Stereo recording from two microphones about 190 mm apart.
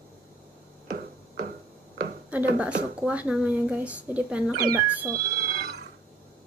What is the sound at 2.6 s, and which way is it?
Speech, 5° right (ahead or behind).